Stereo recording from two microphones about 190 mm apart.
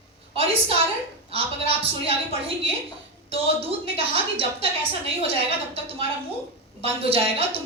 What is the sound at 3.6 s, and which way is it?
Speech, 30° right (ahead or behind).